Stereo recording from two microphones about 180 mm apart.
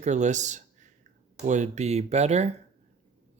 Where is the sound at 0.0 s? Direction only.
40° right (ahead or behind).